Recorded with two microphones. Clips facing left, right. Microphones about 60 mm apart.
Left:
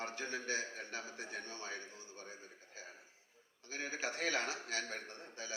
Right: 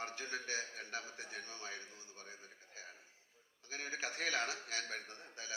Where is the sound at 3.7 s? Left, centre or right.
Left.